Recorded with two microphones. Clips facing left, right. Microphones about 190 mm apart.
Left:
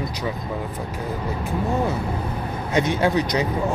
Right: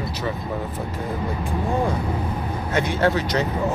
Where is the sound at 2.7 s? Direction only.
15° left (ahead or behind).